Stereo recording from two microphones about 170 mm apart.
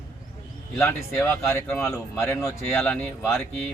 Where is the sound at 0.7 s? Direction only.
15° left (ahead or behind).